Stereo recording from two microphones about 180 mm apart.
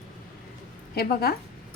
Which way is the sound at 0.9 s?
60° left (ahead or behind).